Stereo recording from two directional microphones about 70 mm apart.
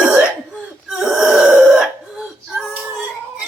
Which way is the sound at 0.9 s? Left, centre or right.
Centre.